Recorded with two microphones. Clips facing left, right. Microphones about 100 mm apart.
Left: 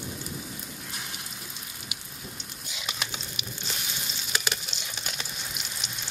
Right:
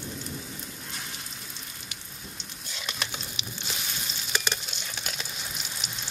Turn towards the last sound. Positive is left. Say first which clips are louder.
# even
turn(degrees=-5)  # may be behind; listen again after turning